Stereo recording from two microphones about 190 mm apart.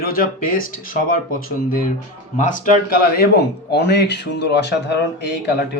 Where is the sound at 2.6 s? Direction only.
50° left (ahead or behind).